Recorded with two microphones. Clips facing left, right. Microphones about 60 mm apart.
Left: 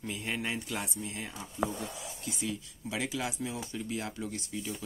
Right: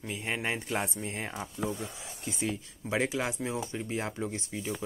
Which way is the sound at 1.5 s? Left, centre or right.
Left.